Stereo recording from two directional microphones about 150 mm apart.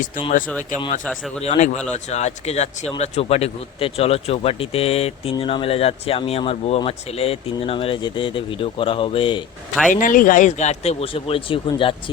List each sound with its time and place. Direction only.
1.4 s speech: 50° left (ahead or behind)
9.9 s speech: 65° left (ahead or behind); by 12.1 s 35° left (ahead or behind)